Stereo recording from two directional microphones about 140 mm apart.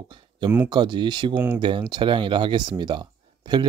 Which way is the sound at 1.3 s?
15° right (ahead or behind).